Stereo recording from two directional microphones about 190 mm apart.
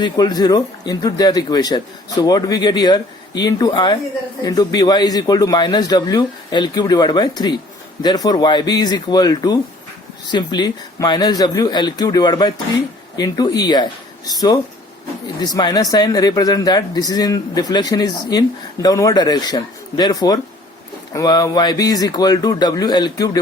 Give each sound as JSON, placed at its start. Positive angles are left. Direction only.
{"t": 0.0, "sound": "speech", "side_deg": 20}
{"t": 15.4, "sound": "speech", "side_deg": 20}